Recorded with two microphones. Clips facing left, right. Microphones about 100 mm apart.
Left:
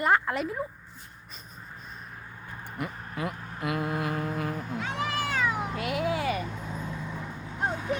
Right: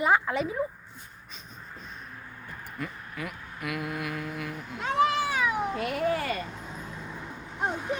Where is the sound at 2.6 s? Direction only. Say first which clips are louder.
Left 2 dB; 30° left (ahead or behind).